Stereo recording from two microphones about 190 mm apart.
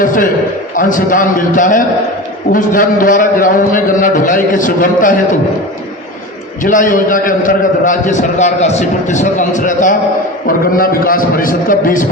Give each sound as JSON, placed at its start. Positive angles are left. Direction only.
{"t": 0.0, "sound": "a man's voice", "side_deg": 45}
{"t": 6.6, "sound": "a man's voice", "side_deg": 45}